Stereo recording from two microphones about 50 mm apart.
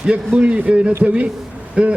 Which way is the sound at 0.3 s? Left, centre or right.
Right.